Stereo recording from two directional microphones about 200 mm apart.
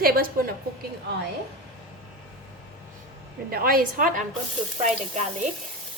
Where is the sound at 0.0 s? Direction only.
50° right (ahead or behind).